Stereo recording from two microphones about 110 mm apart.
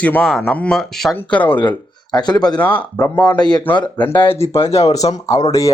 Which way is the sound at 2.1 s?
40° left (ahead or behind).